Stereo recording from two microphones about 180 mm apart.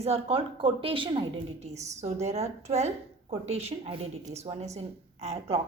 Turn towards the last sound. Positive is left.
turn(degrees=-35)  # may be behind; listen again after turning